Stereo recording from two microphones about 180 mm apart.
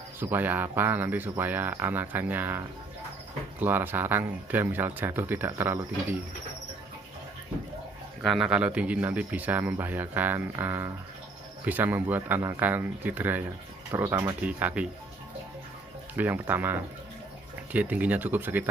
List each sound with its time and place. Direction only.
0.2 s speech: 10° right (ahead or behind)
3.6 s speech: 10° right (ahead or behind)
8.2 s speech: centre (ahead or behind)
16.2 s speech: 10° right (ahead or behind)